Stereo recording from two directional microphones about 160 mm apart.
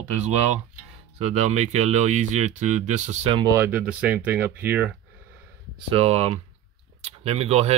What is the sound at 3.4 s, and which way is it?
Speech, 20° right (ahead or behind).